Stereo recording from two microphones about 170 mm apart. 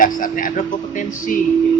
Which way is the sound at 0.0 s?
55° left (ahead or behind).